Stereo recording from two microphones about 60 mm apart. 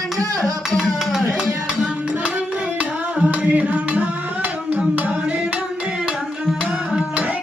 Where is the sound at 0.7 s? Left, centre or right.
Centre.